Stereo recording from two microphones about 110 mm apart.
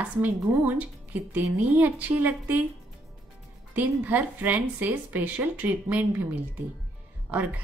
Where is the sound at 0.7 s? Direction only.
15° right (ahead or behind).